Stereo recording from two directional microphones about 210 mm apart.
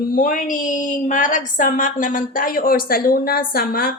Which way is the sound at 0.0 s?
40° left (ahead or behind).